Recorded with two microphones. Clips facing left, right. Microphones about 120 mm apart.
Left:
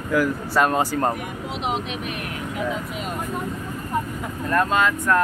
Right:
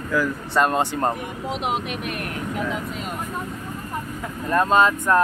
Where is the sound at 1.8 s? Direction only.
55° right (ahead or behind).